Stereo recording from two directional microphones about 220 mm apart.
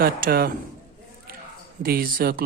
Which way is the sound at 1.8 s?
40° right (ahead or behind).